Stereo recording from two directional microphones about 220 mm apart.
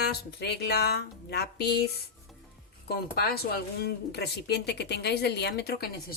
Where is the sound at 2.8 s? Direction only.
45° left (ahead or behind).